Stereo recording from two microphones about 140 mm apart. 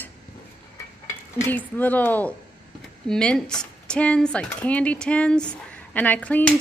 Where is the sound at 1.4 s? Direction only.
15° left (ahead or behind).